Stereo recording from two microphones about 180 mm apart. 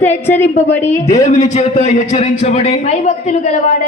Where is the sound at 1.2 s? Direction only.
40° left (ahead or behind).